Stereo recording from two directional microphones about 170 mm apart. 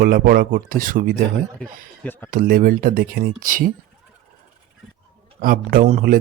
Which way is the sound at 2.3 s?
55° right (ahead or behind).